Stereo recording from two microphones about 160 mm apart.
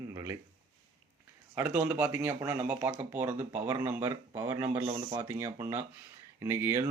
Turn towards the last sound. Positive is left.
turn(degrees=-15)  # may be behind; listen again after turning